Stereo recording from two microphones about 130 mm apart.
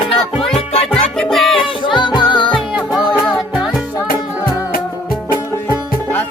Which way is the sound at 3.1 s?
30° left (ahead or behind).